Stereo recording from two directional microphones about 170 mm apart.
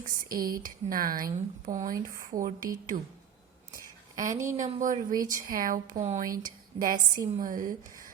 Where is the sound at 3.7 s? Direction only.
50° right (ahead or behind).